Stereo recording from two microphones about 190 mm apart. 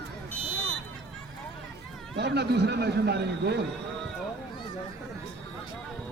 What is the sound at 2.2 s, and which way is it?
A man's voice, 60° right (ahead or behind).